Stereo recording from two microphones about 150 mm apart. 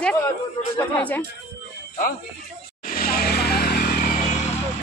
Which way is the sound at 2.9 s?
80° left.